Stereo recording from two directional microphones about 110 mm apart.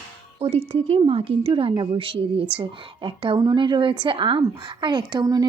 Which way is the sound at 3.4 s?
40° right (ahead or behind).